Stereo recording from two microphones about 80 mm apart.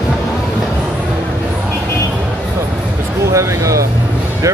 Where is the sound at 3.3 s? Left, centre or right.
Right.